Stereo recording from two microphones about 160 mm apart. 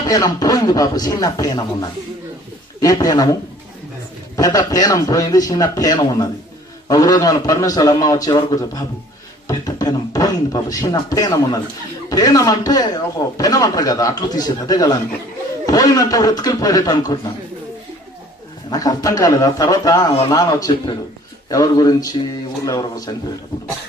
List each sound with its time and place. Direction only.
0.1 s a man's voice: 25° left (ahead or behind)
4.4 s a man's voice: 20° left (ahead or behind)
18.7 s a man's voice: 25° left (ahead or behind)